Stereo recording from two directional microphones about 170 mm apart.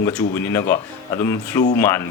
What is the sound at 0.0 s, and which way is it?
Speech, 10° left (ahead or behind).